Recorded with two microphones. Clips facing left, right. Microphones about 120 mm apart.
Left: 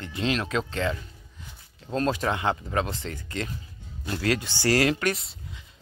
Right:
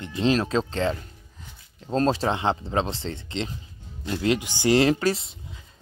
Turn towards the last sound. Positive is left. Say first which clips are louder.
# right 4 dB
turn(degrees=-25)  # may be behind; listen again after turning